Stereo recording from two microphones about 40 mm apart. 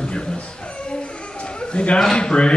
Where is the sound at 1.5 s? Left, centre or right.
Left.